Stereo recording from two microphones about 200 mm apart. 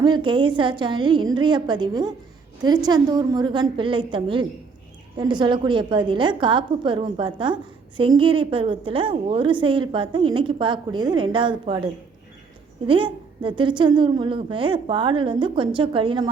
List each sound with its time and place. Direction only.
0.0 s a woman's voice: 25° right (ahead or behind)
12.9 s a woman's voice: 25° right (ahead or behind)